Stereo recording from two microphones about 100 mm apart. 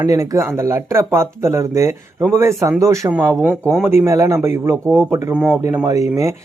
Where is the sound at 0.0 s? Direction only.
35° right (ahead or behind).